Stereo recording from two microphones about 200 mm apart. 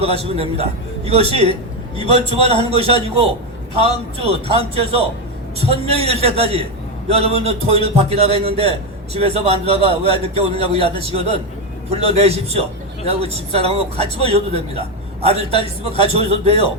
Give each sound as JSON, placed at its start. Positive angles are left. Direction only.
{"t": 0.0, "sound": "a man's voice", "side_deg": -30}